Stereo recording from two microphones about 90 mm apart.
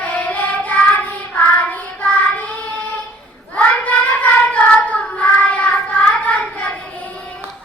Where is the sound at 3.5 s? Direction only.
15° left (ahead or behind).